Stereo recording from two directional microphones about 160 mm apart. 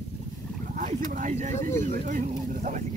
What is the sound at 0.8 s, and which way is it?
Speech, 55° right (ahead or behind).